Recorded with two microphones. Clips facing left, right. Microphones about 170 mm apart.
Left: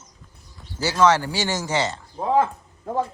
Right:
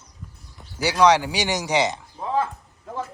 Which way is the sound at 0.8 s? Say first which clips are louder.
Right 1 dB; 15° right (ahead or behind).